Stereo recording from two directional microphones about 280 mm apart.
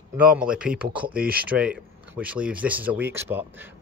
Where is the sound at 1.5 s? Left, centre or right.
Centre.